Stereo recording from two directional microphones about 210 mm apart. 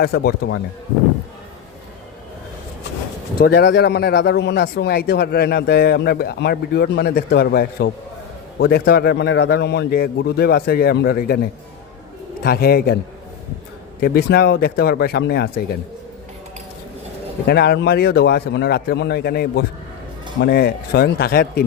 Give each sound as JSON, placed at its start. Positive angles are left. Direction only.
{"t": 0.0, "sound": "speech", "side_deg": 45}
{"t": 3.3, "sound": "speech", "side_deg": 50}
{"t": 12.4, "sound": "speech", "side_deg": 45}
{"t": 14.0, "sound": "speech", "side_deg": 50}
{"t": 17.4, "sound": "speech", "side_deg": 50}